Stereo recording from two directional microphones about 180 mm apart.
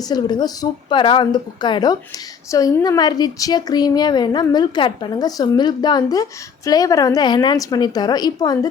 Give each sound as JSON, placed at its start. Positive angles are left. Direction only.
{"t": 0.1, "sound": "a woman's voice", "side_deg": 20}